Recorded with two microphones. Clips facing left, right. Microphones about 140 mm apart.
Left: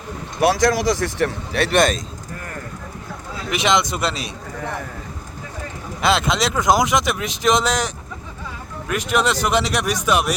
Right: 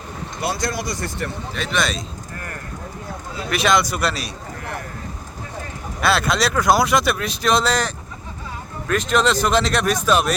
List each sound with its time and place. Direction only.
0.3 s speech: 90° left; by 1.8 s 70° left (ahead or behind)
1.8 s speech: 45° left (ahead or behind)
3.5 s a man's voice: 20° left (ahead or behind)
6.0 s speech: 20° left (ahead or behind)